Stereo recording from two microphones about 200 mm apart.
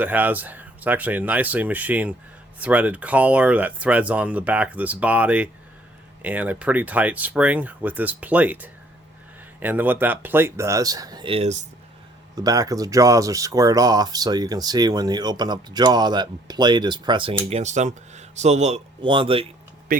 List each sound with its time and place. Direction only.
0.0 s speech: 10° right (ahead or behind); by 11.6 s 30° right (ahead or behind)
12.4 s speech: 20° right (ahead or behind)
19.9 s vehicle: 45° right (ahead or behind)